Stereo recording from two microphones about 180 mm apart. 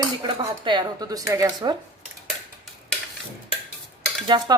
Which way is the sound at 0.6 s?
25° right (ahead or behind).